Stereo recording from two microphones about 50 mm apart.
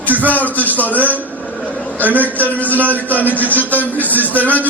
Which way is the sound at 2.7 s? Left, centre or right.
Right.